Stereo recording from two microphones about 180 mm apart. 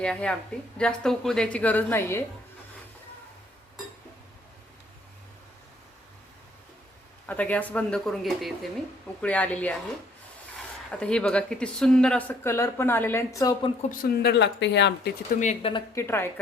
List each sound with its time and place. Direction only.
0.0 s a woman's voice: 5° left (ahead or behind)
7.3 s speech: 10° left (ahead or behind)
10.9 s speech: 5° left (ahead or behind)
14.0 s speech: 65° left (ahead or behind)
15.4 s speech: 40° left (ahead or behind)
15.7 s speech: 15° left (ahead or behind)